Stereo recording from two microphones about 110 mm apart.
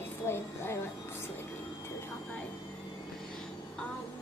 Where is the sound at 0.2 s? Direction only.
25° left (ahead or behind).